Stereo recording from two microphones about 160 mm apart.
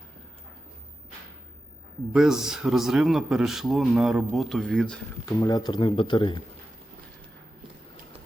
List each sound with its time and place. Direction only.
2.1 s a man's voice: 5° right (ahead or behind)
5.2 s speech: 25° left (ahead or behind)